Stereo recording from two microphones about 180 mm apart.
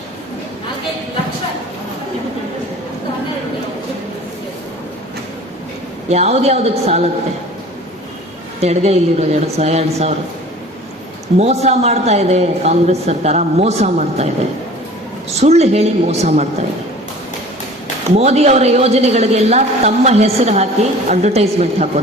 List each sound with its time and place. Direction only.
6.1 s a woman's voice: 35° right (ahead or behind)
8.6 s a woman's voice: 35° right (ahead or behind)
11.3 s a woman's voice: 35° right (ahead or behind)
15.4 s a woman's voice: 35° right (ahead or behind)
18.2 s a woman's voice: 35° right (ahead or behind)